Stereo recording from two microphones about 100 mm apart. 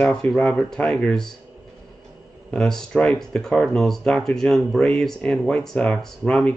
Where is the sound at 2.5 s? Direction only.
5° left (ahead or behind).